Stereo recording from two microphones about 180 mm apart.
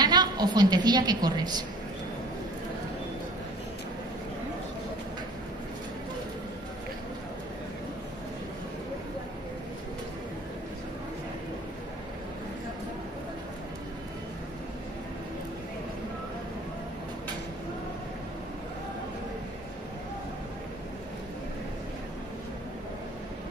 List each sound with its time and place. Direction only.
0.0 s a woman's voice: 20° right (ahead or behind)